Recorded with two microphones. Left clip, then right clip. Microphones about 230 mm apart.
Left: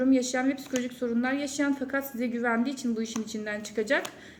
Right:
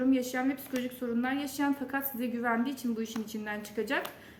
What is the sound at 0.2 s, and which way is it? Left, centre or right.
A woman's voice, centre.